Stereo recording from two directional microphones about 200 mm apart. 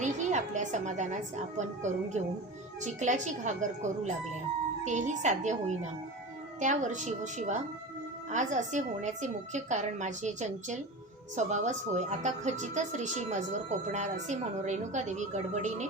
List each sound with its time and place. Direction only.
0.0 s a woman's voice: 35° right (ahead or behind)